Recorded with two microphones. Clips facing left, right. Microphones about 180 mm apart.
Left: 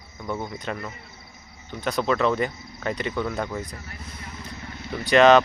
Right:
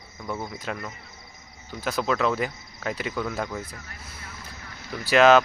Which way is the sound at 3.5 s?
15° left (ahead or behind).